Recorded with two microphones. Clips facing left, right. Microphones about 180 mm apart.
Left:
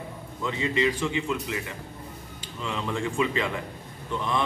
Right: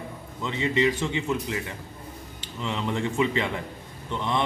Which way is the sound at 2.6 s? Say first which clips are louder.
Right 2 dB; 25° right (ahead or behind).